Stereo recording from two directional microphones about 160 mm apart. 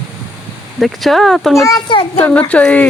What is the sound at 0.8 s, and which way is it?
Speech, centre (ahead or behind).